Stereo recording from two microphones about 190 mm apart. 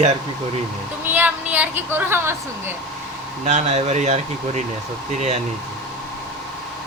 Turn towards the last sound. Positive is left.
turn(degrees=-40)  # may be behind; listen again after turning